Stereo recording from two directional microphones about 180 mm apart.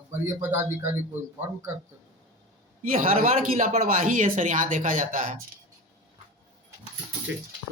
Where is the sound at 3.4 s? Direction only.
40° right (ahead or behind).